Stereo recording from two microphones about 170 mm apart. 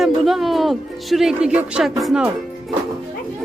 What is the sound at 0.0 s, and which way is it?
Speech, centre (ahead or behind).